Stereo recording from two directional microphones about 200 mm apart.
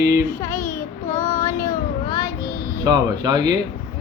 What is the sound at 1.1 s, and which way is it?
Child singing, 40° left (ahead or behind).